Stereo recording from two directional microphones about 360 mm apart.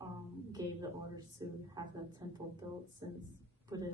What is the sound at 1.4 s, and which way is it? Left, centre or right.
A woman's voice, centre.